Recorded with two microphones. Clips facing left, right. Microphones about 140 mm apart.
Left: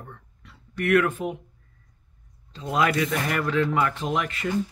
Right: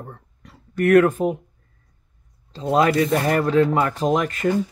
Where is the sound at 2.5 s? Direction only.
35° right (ahead or behind).